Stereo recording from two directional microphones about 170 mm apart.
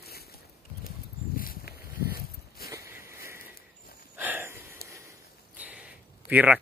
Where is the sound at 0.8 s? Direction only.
60° left (ahead or behind).